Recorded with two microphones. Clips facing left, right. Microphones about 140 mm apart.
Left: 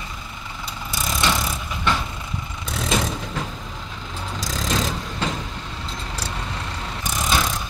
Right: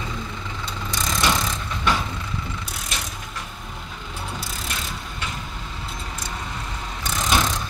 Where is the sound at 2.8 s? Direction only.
90° left.